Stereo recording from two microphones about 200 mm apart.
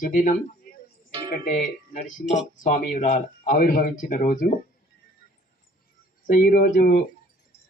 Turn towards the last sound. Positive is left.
turn(degrees=45)  # may be behind; listen again after turning